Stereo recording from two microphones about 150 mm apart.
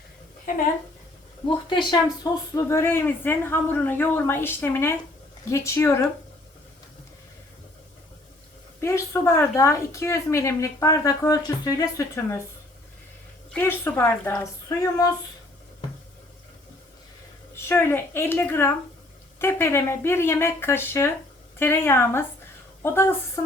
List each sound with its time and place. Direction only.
1.5 s a woman's voice: 30° left (ahead or behind); by 6.1 s 15° left (ahead or behind)
8.8 s a woman's voice: 15° left (ahead or behind)
13.5 s speech: 10° left (ahead or behind)
17.7 s speech: 15° left (ahead or behind)